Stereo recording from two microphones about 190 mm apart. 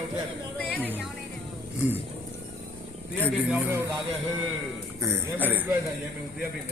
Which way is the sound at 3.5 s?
10° right (ahead or behind).